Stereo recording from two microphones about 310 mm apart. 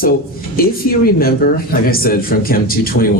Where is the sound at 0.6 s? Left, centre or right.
Left.